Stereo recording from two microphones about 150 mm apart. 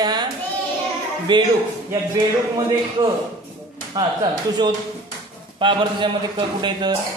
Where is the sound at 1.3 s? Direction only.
30° right (ahead or behind).